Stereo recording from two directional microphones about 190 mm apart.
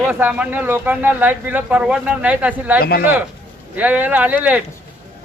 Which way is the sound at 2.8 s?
55° left (ahead or behind).